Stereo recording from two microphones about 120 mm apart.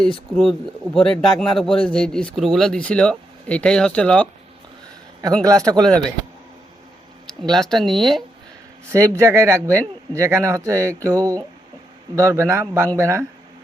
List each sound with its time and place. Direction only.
0.0 s speech: 5° left (ahead or behind)
5.4 s speech: 30° right (ahead or behind)
7.5 s speech: 5° left (ahead or behind)
8.9 s speech: 25° right (ahead or behind)